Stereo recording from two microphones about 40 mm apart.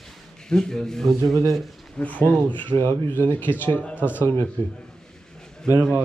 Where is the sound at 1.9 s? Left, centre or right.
Left.